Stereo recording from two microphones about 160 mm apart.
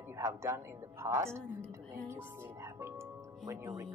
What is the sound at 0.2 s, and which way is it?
A man's voice, 20° right (ahead or behind).